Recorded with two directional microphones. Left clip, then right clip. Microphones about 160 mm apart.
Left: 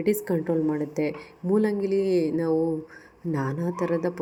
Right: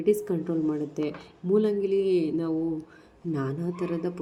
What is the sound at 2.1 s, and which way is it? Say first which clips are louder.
Mantra: left 1 dB; 60° left (ahead or behind).